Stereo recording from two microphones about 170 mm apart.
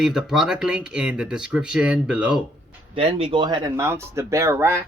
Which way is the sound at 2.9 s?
35° right (ahead or behind).